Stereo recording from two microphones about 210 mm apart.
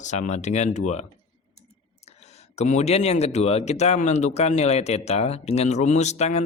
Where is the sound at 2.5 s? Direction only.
30° left (ahead or behind).